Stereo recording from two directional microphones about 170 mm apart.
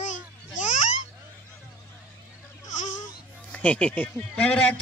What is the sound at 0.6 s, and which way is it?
Babbling, 45° left (ahead or behind).